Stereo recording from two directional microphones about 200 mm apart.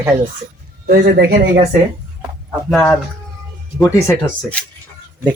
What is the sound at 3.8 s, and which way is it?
Speech, 15° left (ahead or behind).